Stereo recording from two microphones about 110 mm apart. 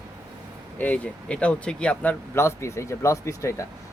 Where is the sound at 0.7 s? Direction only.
15° left (ahead or behind).